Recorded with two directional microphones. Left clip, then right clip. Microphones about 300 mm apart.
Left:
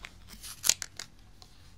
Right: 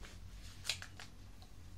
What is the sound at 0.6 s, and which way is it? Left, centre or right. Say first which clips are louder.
Scissors: left 12 dB; left.